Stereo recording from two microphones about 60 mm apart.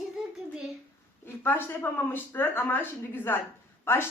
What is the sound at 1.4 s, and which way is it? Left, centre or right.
Speech, left.